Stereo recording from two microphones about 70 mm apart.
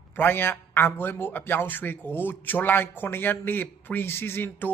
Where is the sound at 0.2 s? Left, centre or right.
Left.